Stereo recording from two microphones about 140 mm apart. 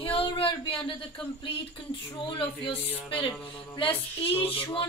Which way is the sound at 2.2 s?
40° left (ahead or behind).